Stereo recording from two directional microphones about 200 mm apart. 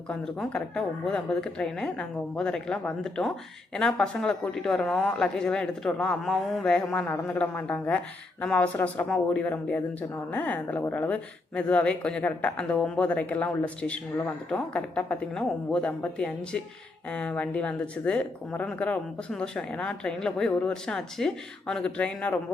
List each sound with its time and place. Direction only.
0.1 s a woman's voice: 5° left (ahead or behind)